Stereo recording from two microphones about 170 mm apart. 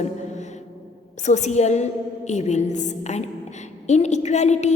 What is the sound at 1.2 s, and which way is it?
A woman's voice, 40° left (ahead or behind).